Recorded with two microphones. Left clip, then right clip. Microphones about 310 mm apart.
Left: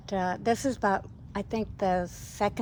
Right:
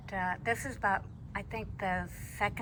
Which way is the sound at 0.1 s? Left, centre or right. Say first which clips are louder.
Left 5 dB; left.